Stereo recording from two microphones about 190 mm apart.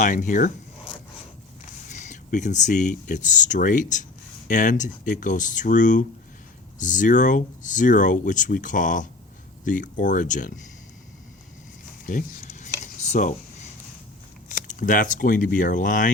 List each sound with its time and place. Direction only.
0.0 s speech: 40° left (ahead or behind)
1.9 s speech: 40° left (ahead or behind)
12.0 s a sound: 40° left (ahead or behind)
14.5 s speech: 40° left (ahead or behind)